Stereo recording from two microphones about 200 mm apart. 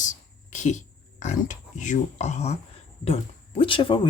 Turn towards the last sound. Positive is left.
turn(degrees=25)  # may be behind; listen again after turning